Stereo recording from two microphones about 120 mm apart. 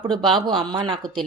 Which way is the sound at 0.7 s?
40° right (ahead or behind).